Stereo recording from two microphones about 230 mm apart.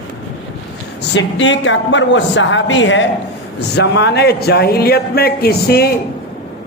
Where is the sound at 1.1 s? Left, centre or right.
Left.